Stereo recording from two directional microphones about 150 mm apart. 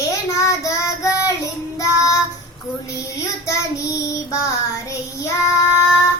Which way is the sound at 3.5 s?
20° left (ahead or behind).